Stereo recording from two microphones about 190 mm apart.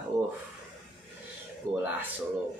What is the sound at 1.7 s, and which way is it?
Speech, 10° right (ahead or behind).